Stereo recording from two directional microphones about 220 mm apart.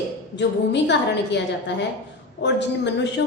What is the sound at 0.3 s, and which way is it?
A woman's voice, 50° left (ahead or behind).